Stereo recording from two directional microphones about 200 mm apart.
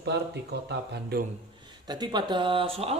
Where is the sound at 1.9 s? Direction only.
20° right (ahead or behind).